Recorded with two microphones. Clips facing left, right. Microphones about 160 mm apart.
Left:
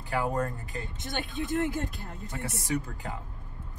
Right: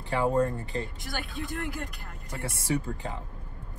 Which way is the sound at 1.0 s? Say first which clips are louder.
Left 2 dB; 20° left (ahead or behind).